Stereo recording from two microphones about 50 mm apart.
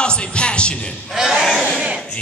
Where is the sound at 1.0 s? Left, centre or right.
Centre.